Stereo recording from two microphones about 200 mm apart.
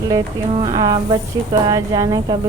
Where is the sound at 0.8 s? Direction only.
20° right (ahead or behind).